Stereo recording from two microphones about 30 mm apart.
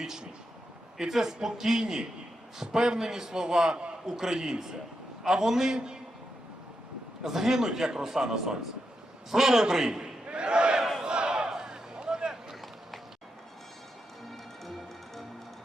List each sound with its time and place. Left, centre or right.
0.0 s a man's voice: centre
7.3 s a man's voice: centre
10.2 s speech: right
11.0 s a sound: right
14.3 s music: centre